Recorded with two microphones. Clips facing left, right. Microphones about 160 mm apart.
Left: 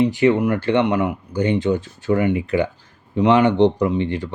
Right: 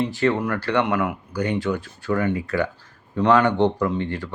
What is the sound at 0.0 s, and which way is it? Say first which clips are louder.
Speech: left 5 dB; 15° left (ahead or behind).